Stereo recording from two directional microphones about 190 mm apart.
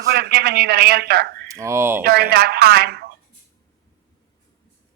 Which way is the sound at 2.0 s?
55° right (ahead or behind).